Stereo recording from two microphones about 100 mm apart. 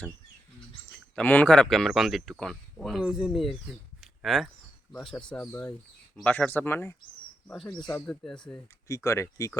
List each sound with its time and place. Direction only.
1.1 s speech: 15° left (ahead or behind); by 3.6 s centre (ahead or behind)
4.0 s a sound: centre (ahead or behind)
4.9 s speech: 10° left (ahead or behind)
7.4 s speech: 5° left (ahead or behind)
8.9 s speech: 30° left (ahead or behind)